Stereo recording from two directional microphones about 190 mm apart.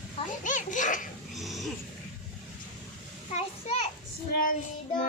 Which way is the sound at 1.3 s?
Centre (ahead or behind).